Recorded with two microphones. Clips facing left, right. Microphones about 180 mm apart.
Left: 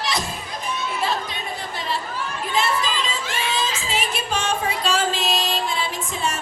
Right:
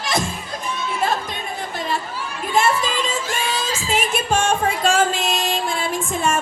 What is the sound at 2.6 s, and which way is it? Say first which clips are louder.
Music: right 4 dB; 50° right (ahead or behind).